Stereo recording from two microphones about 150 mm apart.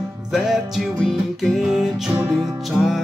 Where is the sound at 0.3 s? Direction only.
Centre (ahead or behind).